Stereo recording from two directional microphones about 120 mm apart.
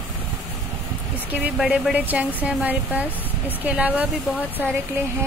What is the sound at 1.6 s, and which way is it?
Speech, 5° right (ahead or behind).